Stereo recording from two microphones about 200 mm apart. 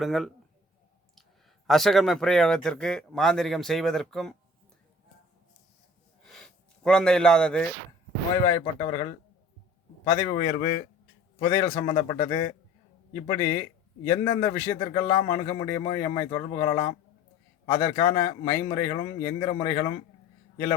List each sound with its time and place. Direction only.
0.0 s speech: centre (ahead or behind)
1.6 s speech: centre (ahead or behind)
6.2 s gasp: centre (ahead or behind)
8.4 s a man's voice: 15° left (ahead or behind)
11.3 s a man's voice: 20° left (ahead or behind)